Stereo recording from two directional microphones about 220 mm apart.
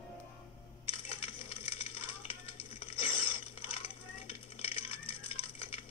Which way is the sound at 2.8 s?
25° left (ahead or behind).